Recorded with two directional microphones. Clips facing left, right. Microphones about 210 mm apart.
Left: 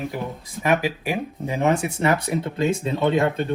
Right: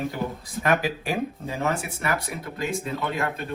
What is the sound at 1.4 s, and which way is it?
Speech, 20° left (ahead or behind).